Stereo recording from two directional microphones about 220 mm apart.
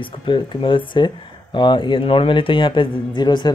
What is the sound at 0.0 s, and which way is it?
Speech, 20° left (ahead or behind).